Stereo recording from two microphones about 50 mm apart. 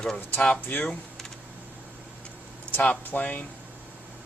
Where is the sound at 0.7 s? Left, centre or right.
Left.